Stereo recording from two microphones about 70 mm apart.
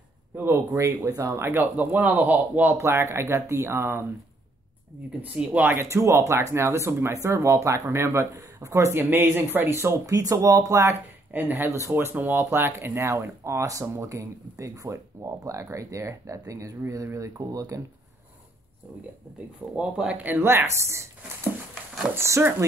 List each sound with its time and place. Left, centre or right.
0.4 s speech: right
1.4 s speech: right
5.3 s speech: right
5.8 s speech: right
8.9 s speech: right
10.0 s speech: right
11.3 s speech: right
19.7 s speech: centre; by 21.1 s right
22.1 s speech: right